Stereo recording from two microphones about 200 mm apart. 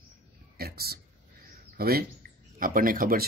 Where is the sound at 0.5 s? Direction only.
50° right (ahead or behind).